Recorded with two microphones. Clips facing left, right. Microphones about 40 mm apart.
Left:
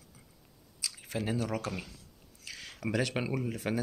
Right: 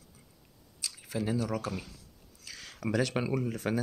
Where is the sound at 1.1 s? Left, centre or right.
Left.